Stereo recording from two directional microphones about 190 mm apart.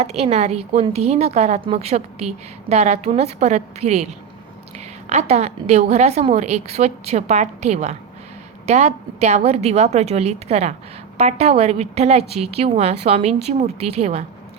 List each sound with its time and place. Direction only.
0.0 s a woman's voice: 35° right (ahead or behind)